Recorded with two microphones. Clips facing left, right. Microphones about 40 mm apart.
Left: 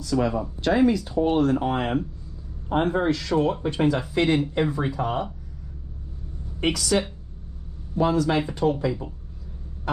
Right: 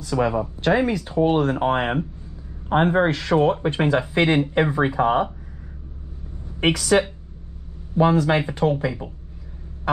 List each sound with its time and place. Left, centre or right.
0.0 s speech: right
6.6 s speech: right